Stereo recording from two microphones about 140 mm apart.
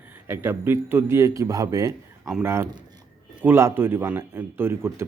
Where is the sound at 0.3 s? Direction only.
15° right (ahead or behind).